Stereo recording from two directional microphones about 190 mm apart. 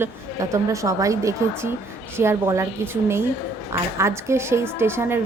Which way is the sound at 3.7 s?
15° right (ahead or behind).